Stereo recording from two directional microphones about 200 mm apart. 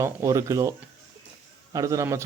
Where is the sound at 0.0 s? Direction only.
15° right (ahead or behind).